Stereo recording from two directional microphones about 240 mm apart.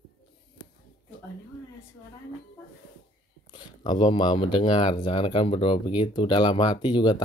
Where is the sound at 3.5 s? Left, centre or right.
Centre.